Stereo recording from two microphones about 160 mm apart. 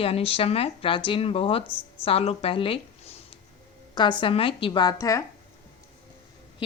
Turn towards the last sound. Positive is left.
turn(degrees=20)  # may be behind; listen again after turning